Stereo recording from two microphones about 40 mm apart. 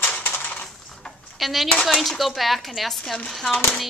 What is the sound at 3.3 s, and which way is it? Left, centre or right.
Speech, centre.